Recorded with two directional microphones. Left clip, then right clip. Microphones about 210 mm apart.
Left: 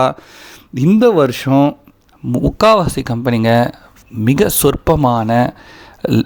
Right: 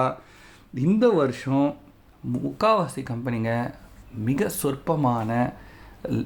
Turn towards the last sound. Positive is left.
turn(degrees=40)  # may be behind; listen again after turning